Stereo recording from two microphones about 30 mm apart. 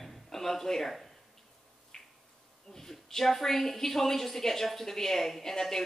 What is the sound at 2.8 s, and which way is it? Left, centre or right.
A woman's voice, centre.